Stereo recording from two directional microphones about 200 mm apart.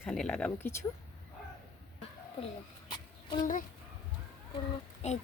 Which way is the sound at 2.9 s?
20° left (ahead or behind).